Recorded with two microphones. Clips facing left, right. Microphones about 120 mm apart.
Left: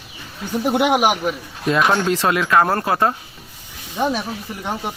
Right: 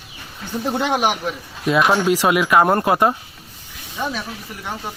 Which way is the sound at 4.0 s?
20° left (ahead or behind).